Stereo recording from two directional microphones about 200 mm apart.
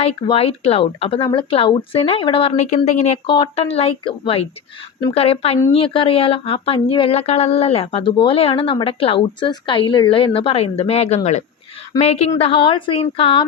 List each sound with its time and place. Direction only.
0.0 s speech: 30° left (ahead or behind)